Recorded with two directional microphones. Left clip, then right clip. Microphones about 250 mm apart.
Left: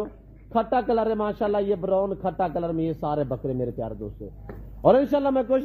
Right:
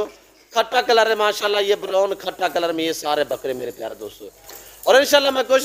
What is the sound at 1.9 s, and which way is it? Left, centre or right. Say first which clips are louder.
Speech: right 3 dB; right.